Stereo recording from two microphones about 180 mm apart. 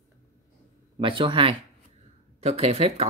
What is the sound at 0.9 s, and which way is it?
Speech, 30° right (ahead or behind).